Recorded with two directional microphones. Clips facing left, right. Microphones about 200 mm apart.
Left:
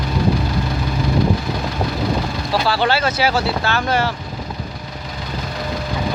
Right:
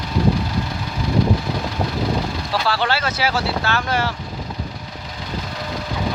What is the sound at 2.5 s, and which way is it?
Speech, 10° left (ahead or behind).